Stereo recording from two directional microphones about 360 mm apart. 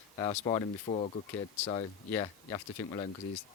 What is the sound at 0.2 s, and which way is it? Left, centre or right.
Speech, centre.